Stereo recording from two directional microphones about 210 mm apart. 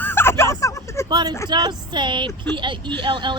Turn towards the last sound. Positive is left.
turn(degrees=-20)  # may be behind; listen again after turning